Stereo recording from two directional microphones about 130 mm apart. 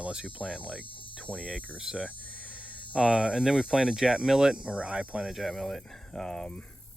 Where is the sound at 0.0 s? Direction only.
5° right (ahead or behind).